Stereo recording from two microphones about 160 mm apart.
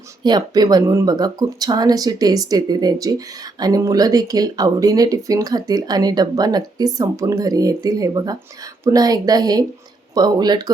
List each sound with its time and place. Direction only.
0.2 s speech: 25° right (ahead or behind)